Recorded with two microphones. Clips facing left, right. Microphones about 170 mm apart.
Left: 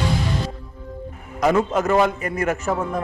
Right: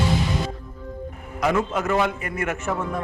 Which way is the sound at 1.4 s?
40° left (ahead or behind).